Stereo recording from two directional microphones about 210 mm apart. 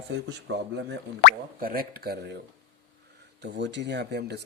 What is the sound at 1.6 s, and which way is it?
Speech, 45° right (ahead or behind).